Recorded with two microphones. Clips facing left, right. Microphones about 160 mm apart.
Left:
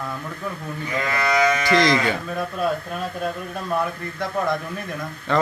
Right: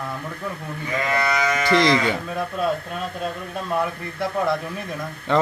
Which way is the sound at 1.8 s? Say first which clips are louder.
Right 1 dB; 20° right (ahead or behind).